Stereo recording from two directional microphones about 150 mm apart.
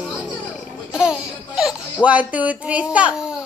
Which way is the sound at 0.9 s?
5° right (ahead or behind).